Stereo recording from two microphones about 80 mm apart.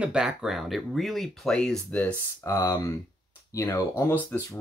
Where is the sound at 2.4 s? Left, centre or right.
Left.